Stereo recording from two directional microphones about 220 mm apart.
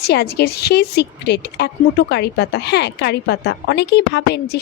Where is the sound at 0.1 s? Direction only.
45° left (ahead or behind).